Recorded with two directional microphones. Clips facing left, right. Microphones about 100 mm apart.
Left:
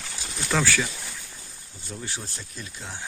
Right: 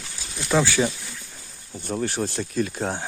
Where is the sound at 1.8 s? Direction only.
60° right (ahead or behind).